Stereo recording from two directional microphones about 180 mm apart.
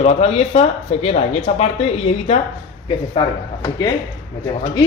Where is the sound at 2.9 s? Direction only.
30° left (ahead or behind).